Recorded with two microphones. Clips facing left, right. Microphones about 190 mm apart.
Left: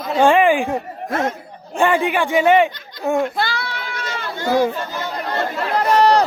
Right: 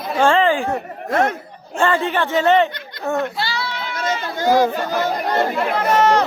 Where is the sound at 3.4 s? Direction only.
50° left (ahead or behind).